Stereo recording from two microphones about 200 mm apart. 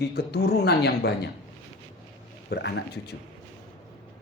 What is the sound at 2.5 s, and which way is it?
Speech, 55° left (ahead or behind).